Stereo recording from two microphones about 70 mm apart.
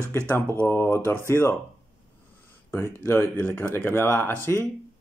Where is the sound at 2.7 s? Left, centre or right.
Left.